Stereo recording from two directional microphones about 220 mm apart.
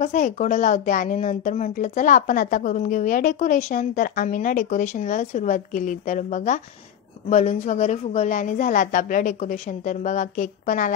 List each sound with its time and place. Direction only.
0.0 s speech: 35° left (ahead or behind)